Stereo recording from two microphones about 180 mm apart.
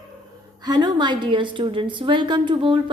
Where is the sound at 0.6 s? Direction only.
25° right (ahead or behind).